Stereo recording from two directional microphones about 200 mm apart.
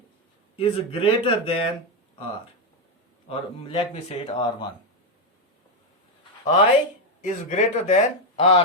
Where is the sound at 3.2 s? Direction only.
25° left (ahead or behind).